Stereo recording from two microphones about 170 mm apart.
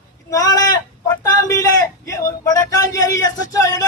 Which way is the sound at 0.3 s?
20° left (ahead or behind).